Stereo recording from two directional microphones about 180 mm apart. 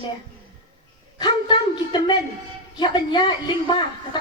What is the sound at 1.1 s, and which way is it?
A woman's voice, 25° left (ahead or behind).